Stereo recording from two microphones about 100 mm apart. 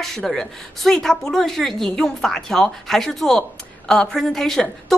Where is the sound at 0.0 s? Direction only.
5° left (ahead or behind).